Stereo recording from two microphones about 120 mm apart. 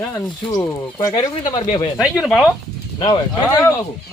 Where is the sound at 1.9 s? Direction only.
5° right (ahead or behind).